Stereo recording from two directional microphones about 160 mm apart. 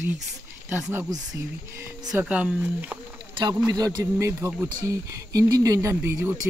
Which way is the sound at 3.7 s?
25° right (ahead or behind).